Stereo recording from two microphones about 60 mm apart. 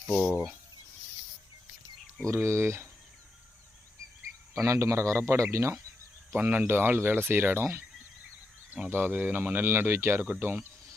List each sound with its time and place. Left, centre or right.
2.3 s speech: right
4.5 s speech: right
6.3 s speech: right
8.9 s speech: right